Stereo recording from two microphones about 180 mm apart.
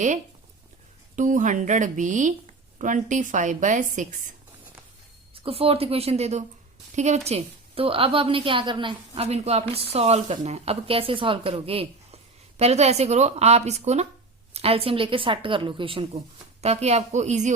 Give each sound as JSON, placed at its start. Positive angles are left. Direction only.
{"t": 1.1, "sound": "a woman's voice", "side_deg": -45}
{"t": 5.3, "sound": "a woman's voice", "side_deg": -30}